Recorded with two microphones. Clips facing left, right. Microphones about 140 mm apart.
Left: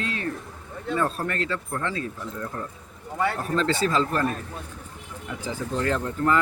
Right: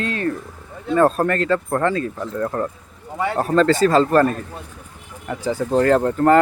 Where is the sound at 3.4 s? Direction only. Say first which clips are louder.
Right 13 dB; 45° right (ahead or behind).